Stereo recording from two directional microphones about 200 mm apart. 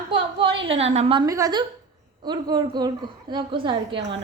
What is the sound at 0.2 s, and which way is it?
A woman's voice, 25° right (ahead or behind).